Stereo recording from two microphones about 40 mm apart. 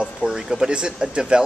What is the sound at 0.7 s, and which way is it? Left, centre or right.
Speech, right.